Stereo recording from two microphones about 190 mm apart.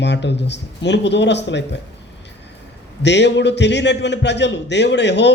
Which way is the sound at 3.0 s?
65° left (ahead or behind).